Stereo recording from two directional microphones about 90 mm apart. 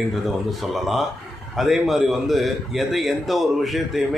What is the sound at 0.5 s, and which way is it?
Speech, centre (ahead or behind).